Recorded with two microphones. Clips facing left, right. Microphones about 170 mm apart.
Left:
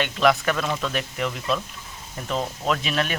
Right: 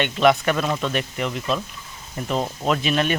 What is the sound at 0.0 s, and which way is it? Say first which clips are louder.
Speech: right 3 dB; centre (ahead or behind).